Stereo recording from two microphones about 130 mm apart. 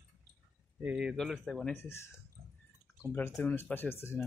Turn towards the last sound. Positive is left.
turn(degrees=20)  # may be behind; listen again after turning